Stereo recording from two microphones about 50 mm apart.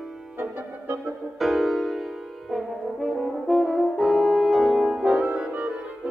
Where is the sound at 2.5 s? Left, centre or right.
Centre.